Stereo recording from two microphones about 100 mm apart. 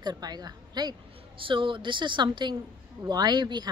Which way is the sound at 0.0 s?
40° right (ahead or behind).